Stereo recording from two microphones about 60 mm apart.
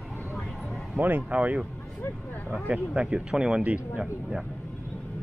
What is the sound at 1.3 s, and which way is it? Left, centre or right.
Speech, right.